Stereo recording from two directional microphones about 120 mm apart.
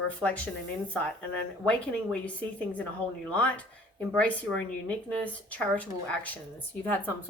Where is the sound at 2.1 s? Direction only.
10° left (ahead or behind).